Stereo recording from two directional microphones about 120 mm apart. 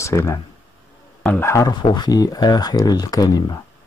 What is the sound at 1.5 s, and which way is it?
Speech, 30° left (ahead or behind).